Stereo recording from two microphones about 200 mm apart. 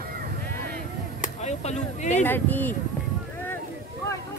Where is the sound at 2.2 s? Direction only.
10° left (ahead or behind).